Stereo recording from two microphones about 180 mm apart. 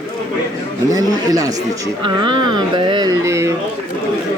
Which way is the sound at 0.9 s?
20° right (ahead or behind).